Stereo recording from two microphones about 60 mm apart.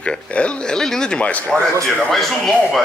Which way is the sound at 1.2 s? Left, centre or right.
Left.